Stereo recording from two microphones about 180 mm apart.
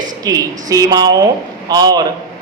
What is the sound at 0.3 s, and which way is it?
A man's voice, 20° right (ahead or behind).